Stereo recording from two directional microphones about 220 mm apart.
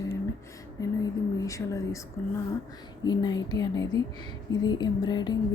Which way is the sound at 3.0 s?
20° left (ahead or behind).